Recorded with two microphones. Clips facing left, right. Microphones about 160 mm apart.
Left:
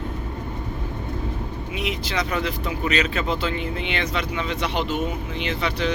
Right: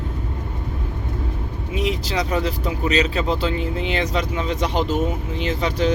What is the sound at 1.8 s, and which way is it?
Speech, 35° right (ahead or behind).